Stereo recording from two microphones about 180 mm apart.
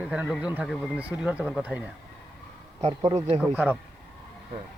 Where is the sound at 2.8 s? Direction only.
35° right (ahead or behind).